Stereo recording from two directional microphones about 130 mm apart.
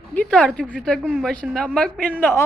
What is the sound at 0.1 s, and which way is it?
A woman's voice, 10° left (ahead or behind).